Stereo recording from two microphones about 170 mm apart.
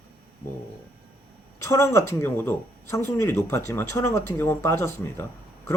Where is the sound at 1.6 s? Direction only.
15° left (ahead or behind).